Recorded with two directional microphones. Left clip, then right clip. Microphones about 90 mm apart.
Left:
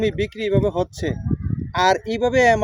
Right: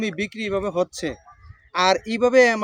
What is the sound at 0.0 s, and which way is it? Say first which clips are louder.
Speech: left 5 dB; 50° right (ahead or behind).